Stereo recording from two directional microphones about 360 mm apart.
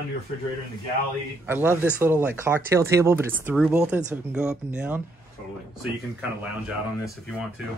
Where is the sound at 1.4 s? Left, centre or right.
Centre.